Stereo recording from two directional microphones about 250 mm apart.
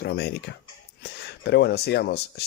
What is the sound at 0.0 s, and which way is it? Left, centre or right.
Speech, left.